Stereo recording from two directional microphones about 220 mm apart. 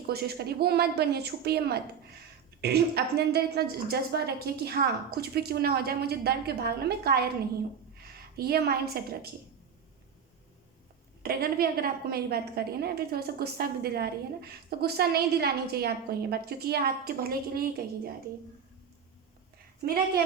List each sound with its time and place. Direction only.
0.1 s a woman's voice: 45° right (ahead or behind)
7.9 s a sound: 45° right (ahead or behind)
11.2 s a woman's voice: 45° right (ahead or behind)